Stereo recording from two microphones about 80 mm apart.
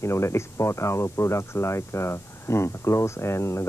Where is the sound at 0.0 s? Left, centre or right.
Left.